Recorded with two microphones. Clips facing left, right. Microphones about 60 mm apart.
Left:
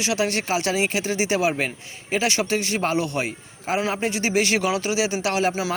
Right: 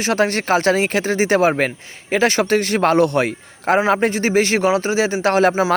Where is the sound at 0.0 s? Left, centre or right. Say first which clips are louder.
Right 5 dB; right.